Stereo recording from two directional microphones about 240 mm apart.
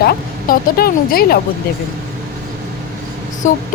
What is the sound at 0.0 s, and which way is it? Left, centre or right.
Speech, left.